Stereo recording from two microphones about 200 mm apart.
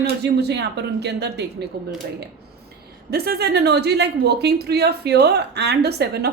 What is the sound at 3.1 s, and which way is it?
A woman's voice, 50° right (ahead or behind).